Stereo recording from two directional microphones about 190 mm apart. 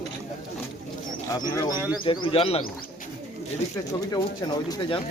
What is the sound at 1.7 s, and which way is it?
Speech, 10° right (ahead or behind).